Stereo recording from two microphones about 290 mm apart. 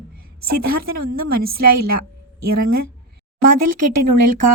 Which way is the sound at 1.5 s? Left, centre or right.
Right.